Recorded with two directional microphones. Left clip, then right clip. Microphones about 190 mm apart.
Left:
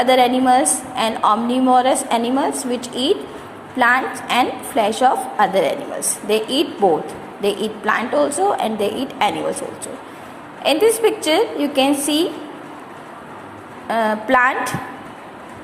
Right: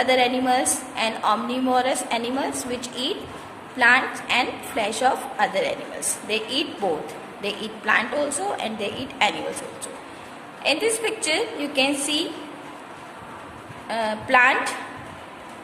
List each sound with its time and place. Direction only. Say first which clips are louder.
0.0 s a woman's voice: left 6 dB; 10° left (ahead or behind)
13.8 s a woman's voice: left 7 dB; 15° left (ahead or behind)